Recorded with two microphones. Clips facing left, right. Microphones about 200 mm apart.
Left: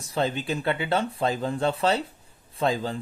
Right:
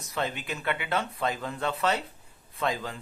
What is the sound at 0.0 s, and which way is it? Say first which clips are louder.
Speech: left 6 dB; 30° left (ahead or behind).